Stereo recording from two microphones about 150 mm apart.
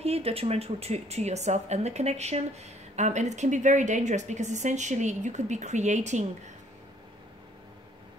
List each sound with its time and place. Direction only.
0.0 s speech: 40° right (ahead or behind)